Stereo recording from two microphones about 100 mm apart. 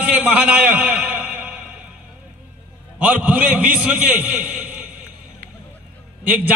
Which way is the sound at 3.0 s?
15° right (ahead or behind).